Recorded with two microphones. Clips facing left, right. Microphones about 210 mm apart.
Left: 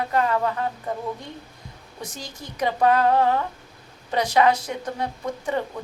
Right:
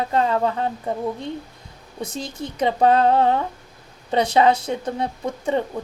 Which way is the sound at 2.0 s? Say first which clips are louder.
Right 8 dB; 25° right (ahead or behind).